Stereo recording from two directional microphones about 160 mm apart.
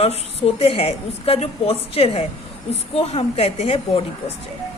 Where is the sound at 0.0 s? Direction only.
40° left (ahead or behind).